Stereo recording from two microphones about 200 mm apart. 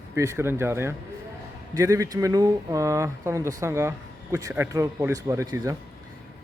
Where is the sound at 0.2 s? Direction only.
15° right (ahead or behind).